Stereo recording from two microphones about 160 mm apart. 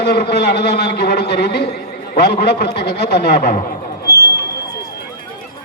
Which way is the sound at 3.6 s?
55° left (ahead or behind).